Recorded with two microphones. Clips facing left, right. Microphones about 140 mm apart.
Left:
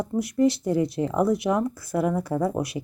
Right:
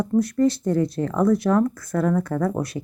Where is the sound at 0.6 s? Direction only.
5° left (ahead or behind); by 1.7 s 20° left (ahead or behind).